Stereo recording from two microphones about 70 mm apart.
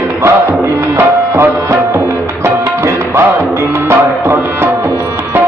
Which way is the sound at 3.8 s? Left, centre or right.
Right.